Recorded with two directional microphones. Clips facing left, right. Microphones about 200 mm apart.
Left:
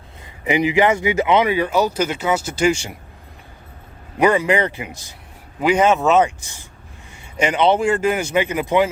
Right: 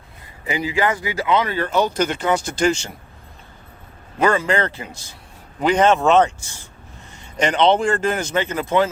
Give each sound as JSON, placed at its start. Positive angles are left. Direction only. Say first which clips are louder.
{"t": 0.4, "sound": "speech", "louder": "left 5 dB", "side_deg": 20}
{"t": 4.2, "sound": "speech", "louder": "left 2 dB", "side_deg": 15}